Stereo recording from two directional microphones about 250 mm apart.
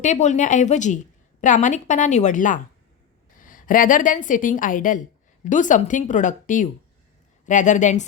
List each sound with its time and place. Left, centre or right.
0.0 s a woman's voice: left